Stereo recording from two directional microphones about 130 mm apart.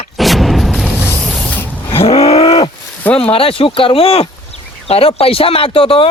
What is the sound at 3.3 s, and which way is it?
Speech, 45° left (ahead or behind).